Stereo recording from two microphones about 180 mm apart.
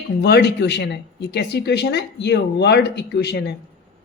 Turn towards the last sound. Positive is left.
turn(degrees=70)  # may be behind; listen again after turning